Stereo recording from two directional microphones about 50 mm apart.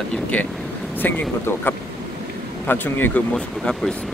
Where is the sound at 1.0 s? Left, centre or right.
Left.